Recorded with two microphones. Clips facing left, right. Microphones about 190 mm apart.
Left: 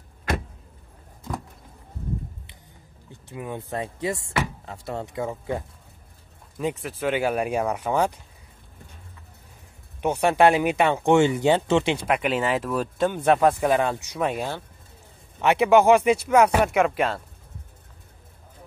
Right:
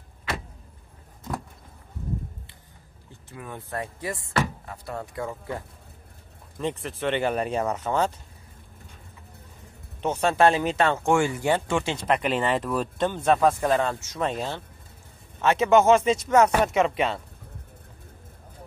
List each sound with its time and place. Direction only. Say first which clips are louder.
3.1 s speech: left 6 dB; 15° left (ahead or behind)
6.6 s speech: left 2 dB; 5° left (ahead or behind)
10.0 s speech: left 2 dB; 15° left (ahead or behind)